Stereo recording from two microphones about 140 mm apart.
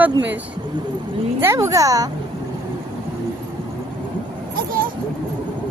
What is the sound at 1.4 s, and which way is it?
Speech, 20° right (ahead or behind).